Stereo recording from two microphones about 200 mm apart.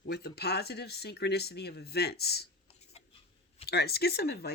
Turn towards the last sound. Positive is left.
turn(degrees=50)  # may be behind; listen again after turning